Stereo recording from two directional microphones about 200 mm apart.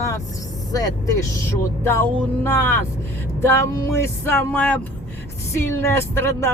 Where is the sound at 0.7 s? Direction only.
20° left (ahead or behind).